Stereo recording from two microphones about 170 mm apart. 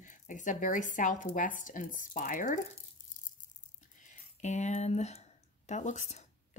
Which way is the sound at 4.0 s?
45° left (ahead or behind).